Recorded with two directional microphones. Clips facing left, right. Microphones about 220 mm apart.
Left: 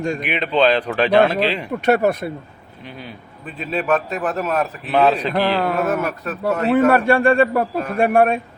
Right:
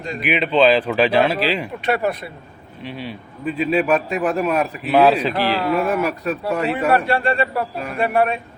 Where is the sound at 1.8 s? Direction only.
45° left (ahead or behind).